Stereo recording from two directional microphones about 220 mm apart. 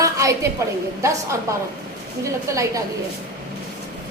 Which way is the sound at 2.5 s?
15° right (ahead or behind).